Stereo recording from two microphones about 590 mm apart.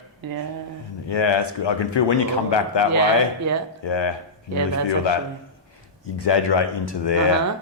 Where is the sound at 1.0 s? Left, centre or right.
Left.